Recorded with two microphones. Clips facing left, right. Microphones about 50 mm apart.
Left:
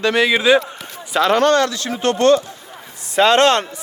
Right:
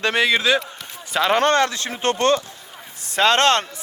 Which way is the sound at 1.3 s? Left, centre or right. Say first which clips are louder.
Left 2 dB; right.